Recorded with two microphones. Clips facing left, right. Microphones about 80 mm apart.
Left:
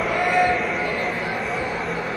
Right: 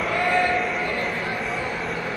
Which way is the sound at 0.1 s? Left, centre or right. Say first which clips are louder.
Left 2 dB; centre.